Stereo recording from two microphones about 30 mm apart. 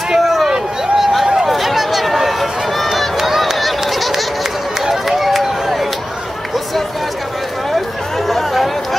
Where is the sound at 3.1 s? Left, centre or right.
Centre.